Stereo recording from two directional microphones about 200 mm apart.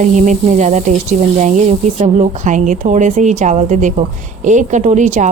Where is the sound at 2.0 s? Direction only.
35° right (ahead or behind).